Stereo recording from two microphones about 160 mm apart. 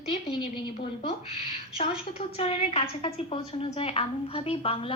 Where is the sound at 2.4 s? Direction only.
40° left (ahead or behind).